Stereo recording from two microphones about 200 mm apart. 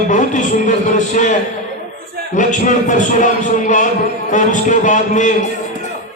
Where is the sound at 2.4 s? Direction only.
40° left (ahead or behind).